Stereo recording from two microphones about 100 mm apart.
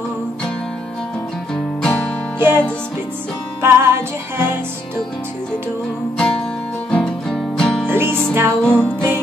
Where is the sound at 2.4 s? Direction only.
20° right (ahead or behind).